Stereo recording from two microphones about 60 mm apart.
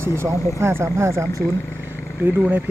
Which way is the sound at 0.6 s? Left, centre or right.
Right.